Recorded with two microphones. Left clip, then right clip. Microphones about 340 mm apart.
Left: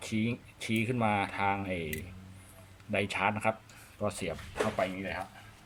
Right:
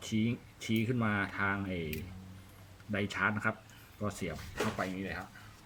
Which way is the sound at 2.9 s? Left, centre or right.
Centre.